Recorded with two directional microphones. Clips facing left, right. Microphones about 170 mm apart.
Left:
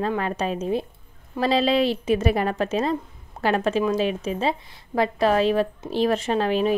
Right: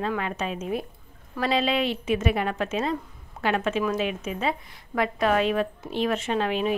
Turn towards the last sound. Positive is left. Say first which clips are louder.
# left 4 dB
turn(degrees=35)  # may be behind; listen again after turning